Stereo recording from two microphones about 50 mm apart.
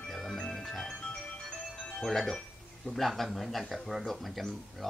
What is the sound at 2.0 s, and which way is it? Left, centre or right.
Speech, centre.